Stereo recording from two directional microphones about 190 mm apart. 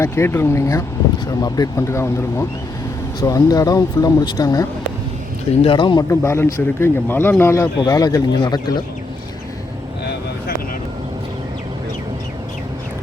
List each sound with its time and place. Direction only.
0.0 s speech: 10° left (ahead or behind)